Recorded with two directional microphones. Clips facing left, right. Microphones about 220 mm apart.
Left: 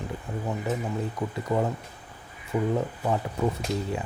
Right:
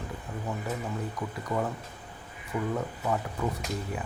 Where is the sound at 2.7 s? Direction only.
25° left (ahead or behind).